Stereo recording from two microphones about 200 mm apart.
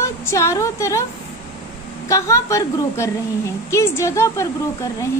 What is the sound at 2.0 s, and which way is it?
Speech, 15° left (ahead or behind).